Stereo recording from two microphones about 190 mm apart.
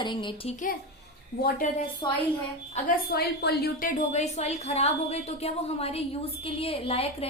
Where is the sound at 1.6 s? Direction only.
40° left (ahead or behind).